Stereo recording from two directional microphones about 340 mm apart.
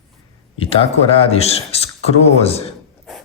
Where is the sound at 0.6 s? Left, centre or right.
Centre.